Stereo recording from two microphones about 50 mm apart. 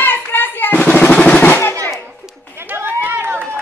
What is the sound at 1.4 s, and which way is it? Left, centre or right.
Drum roll, left.